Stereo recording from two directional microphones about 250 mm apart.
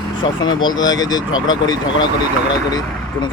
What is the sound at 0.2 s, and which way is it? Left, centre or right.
Speech, centre.